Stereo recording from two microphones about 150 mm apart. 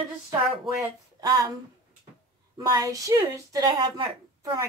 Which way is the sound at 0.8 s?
25° right (ahead or behind).